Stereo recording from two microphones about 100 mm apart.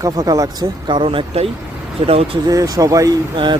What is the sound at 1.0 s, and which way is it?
Speech, 65° right (ahead or behind).